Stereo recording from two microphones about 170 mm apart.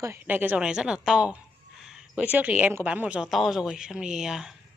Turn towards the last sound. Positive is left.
turn(degrees=-5)  # may be behind; listen again after turning